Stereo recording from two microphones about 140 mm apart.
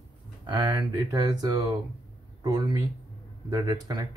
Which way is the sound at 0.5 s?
30° right (ahead or behind).